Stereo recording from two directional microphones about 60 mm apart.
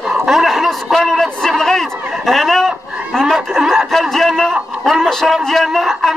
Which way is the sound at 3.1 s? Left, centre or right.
Centre.